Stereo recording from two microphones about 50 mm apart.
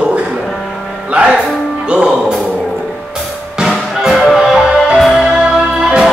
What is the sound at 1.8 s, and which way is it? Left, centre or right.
Speech, right.